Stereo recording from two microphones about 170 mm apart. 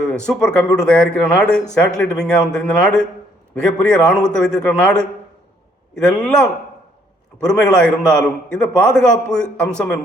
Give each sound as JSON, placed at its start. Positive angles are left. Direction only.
{"t": 0.3, "sound": "a man's voice", "side_deg": 5}